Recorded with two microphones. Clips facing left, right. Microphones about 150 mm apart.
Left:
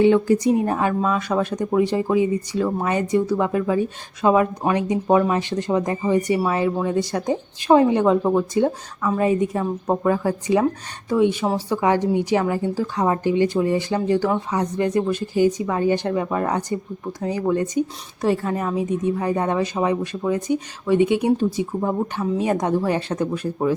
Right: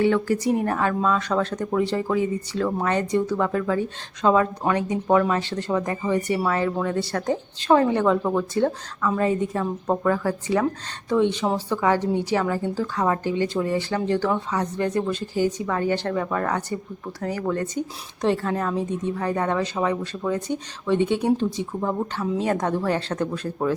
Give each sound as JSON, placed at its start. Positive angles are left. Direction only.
{"t": 0.0, "sound": "a woman's voice", "side_deg": 20}